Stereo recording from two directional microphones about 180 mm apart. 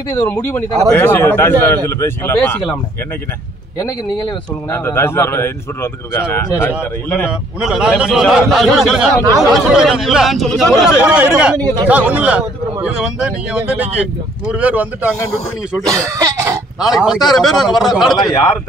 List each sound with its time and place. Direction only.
0.3 s speech: 10° left (ahead or behind)
4.6 s speech: 15° left (ahead or behind)
7.6 s a man's voice: 5° right (ahead or behind)
16.8 s a man's voice: centre (ahead or behind)
18.1 s a man's voice: 20° left (ahead or behind)